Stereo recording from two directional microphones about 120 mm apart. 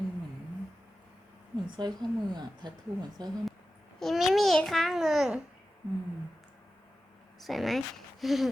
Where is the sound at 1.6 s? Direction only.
40° right (ahead or behind).